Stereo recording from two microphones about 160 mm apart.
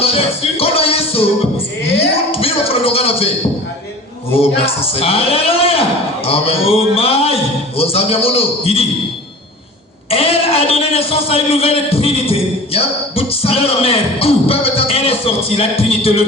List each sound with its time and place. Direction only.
0.0 s a man's voice: 40° left (ahead or behind)
4.4 s a man's voice: 35° left (ahead or behind)
10.1 s a man's voice: 40° left (ahead or behind)